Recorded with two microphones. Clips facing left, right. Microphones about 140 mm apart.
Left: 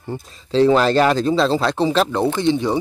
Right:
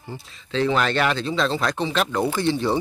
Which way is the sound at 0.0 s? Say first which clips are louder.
Left 8 dB; 55° left (ahead or behind).